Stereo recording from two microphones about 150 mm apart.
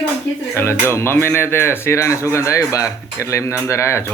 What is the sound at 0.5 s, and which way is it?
Speech, 15° left (ahead or behind).